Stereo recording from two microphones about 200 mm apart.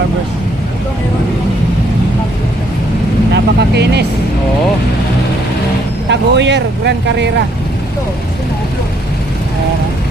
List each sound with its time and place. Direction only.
3.3 s vehicle: 55° right (ahead or behind)
6.1 s speech: 60° right (ahead or behind)